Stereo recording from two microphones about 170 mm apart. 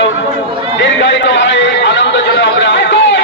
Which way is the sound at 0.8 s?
90° left.